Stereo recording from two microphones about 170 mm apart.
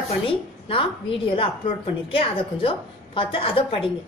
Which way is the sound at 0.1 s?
30° left (ahead or behind).